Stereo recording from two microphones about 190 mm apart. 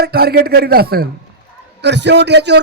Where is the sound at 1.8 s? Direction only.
65° right (ahead or behind).